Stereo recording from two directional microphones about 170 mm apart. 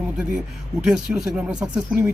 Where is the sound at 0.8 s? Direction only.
5° right (ahead or behind).